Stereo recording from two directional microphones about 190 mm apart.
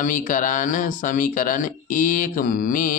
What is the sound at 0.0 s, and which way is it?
Speech, 45° left (ahead or behind).